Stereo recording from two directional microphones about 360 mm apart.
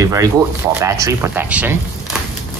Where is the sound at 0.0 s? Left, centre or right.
Centre.